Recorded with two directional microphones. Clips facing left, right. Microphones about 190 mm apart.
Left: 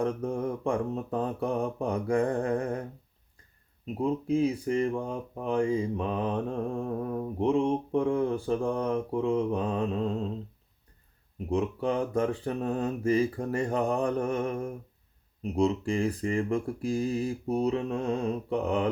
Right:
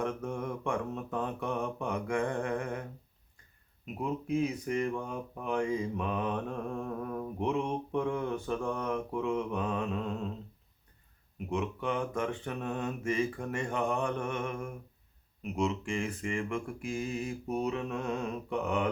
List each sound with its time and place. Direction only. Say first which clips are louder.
0.0 s speech: left 5 dB; 30° left (ahead or behind)
3.8 s speech: left 6 dB; 30° left (ahead or behind)
11.3 s speech: left 5 dB; 35° left (ahead or behind)